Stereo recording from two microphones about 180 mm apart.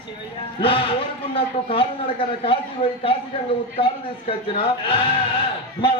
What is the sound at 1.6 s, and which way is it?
Speech, 30° left (ahead or behind).